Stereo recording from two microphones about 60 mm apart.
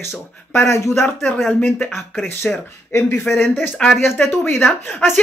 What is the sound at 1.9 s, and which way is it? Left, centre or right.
Speech, centre.